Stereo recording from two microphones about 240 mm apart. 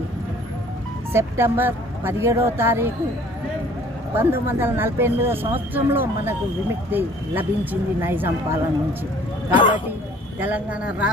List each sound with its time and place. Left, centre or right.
1.1 s speech: centre
4.1 s speech: centre
9.5 s speech: left
10.4 s speech: centre